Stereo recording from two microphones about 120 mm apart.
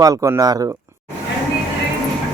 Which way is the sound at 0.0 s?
30° right (ahead or behind).